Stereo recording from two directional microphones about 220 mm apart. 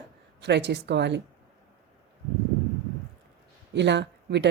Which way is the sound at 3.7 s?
50° right (ahead or behind).